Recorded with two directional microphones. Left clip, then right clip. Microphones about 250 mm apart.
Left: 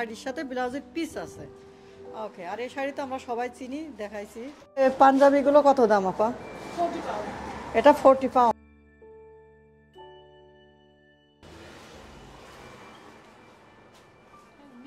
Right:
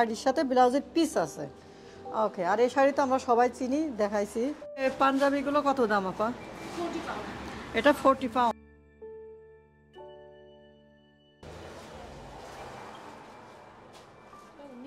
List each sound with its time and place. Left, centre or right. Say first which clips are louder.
0.0 s a woman's voice: right 6 dB; centre
2.1 s a woman's voice: right 8 dB; right
4.7 s speech: left 8 dB; centre
7.7 s a woman's voice: left 6 dB; centre